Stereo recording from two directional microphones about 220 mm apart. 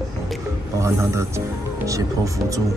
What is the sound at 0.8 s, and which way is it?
Speech, 10° right (ahead or behind).